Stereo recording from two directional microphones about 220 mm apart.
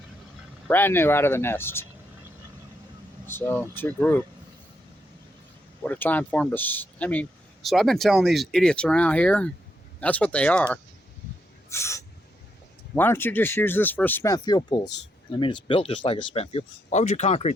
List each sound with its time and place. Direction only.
0.7 s speech: 10° left (ahead or behind)
3.2 s speech: 10° left (ahead or behind)
5.8 s speech: 5° left (ahead or behind); by 17.5 s 30° left (ahead or behind)